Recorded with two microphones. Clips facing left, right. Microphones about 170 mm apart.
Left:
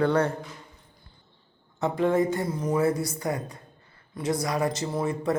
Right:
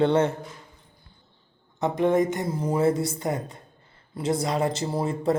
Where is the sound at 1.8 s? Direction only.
20° right (ahead or behind).